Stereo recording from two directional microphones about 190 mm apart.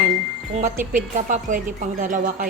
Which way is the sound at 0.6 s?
40° right (ahead or behind).